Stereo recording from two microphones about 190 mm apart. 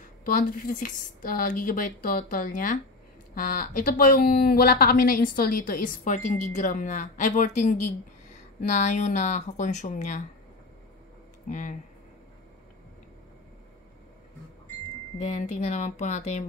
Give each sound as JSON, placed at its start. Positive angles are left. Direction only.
{"t": 0.2, "sound": "speech", "side_deg": 45}
{"t": 11.4, "sound": "speech", "side_deg": 40}
{"t": 15.2, "sound": "speech", "side_deg": 40}